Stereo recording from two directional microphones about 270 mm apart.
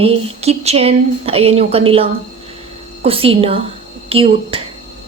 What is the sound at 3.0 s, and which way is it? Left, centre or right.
Speech, right.